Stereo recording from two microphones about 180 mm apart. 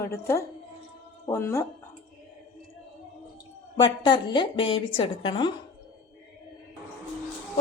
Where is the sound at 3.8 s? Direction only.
25° left (ahead or behind).